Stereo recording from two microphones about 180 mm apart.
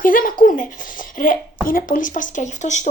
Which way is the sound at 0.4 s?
45° left (ahead or behind).